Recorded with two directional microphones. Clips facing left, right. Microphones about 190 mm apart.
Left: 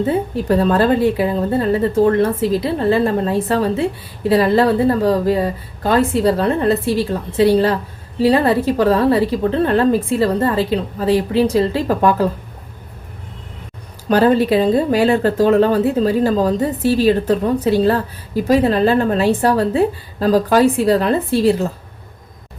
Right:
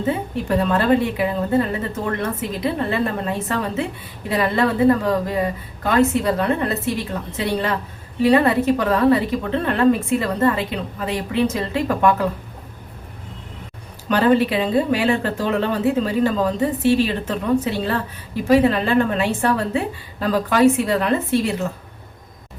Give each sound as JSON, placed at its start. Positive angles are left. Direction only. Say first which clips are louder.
{"t": 0.4, "sound": "a woman's voice", "louder": "left 3 dB", "side_deg": 35}
{"t": 14.1, "sound": "a woman's voice", "louder": "left 4 dB", "side_deg": 40}